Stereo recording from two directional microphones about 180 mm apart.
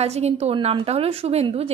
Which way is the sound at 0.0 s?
35° right (ahead or behind).